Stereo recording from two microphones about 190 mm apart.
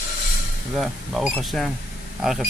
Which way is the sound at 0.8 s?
Centre (ahead or behind).